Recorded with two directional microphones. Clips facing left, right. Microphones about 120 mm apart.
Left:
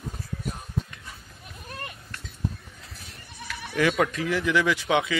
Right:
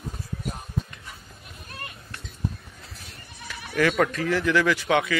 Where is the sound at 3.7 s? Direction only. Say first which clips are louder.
Right 1 dB; 15° left (ahead or behind).